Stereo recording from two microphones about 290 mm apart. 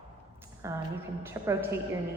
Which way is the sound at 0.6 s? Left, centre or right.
Centre.